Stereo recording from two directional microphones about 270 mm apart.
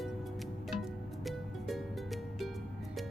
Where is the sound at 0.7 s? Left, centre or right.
Centre.